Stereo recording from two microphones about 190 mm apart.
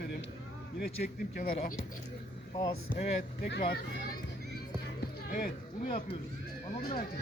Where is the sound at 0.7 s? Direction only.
50° left (ahead or behind).